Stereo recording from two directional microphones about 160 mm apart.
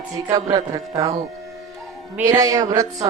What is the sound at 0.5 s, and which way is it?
Speech, 20° right (ahead or behind).